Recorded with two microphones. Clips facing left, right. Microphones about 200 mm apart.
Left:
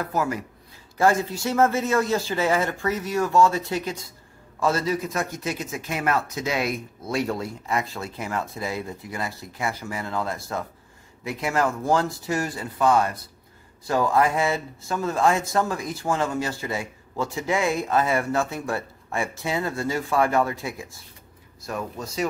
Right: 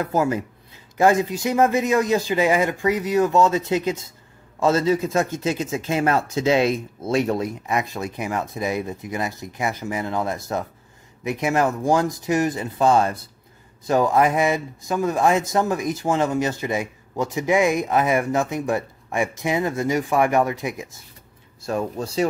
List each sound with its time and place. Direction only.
0.0 s speech: 25° right (ahead or behind)
21.6 s speech: 30° right (ahead or behind)